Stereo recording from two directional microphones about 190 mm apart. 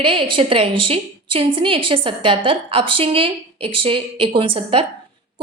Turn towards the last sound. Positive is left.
turn(degrees=-30)  # may be behind; listen again after turning